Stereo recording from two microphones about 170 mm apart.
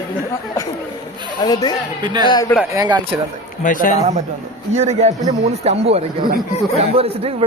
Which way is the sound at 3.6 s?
50° left (ahead or behind).